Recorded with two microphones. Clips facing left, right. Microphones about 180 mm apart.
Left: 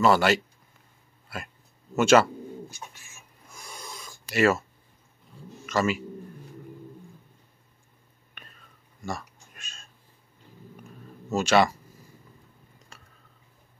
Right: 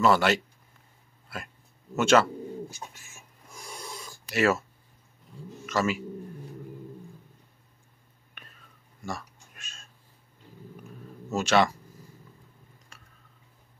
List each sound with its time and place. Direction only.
0.0 s speech: centre (ahead or behind)
2.0 s speech: 5° left (ahead or behind)
4.3 s speech: centre (ahead or behind)
5.7 s speech: centre (ahead or behind)
8.4 s whispering: 5° right (ahead or behind)
9.0 s a sound: centre (ahead or behind)
11.3 s speech: centre (ahead or behind)
12.9 s a sound: 25° left (ahead or behind)